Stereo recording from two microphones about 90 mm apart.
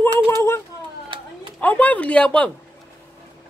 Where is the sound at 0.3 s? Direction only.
30° left (ahead or behind).